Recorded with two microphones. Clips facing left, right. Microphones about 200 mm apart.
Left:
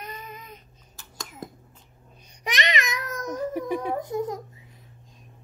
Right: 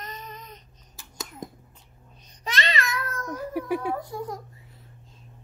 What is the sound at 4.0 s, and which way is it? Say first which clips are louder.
Speech: left 5 dB; 20° left (ahead or behind).